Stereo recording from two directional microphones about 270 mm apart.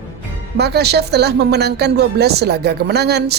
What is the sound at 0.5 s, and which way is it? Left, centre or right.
Speech, right.